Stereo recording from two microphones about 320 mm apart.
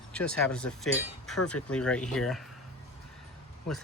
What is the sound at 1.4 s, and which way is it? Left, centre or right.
Speech, left.